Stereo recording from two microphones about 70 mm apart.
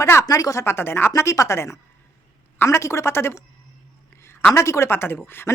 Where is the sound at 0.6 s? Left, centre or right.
Left.